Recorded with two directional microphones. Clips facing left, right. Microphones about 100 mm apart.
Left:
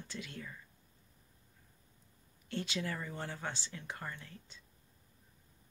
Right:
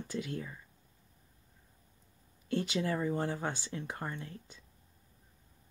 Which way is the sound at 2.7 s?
20° right (ahead or behind).